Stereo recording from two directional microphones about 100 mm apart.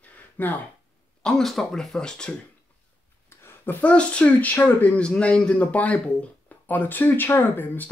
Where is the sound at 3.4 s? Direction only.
20° left (ahead or behind).